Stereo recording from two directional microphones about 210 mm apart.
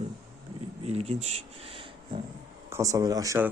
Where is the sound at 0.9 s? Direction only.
30° right (ahead or behind).